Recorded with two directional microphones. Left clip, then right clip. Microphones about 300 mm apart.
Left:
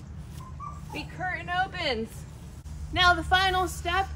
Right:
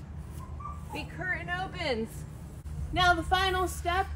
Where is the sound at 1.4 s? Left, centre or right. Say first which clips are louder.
Left 5 dB; centre.